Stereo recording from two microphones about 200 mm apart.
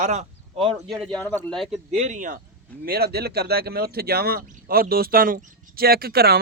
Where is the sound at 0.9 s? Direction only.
Centre (ahead or behind).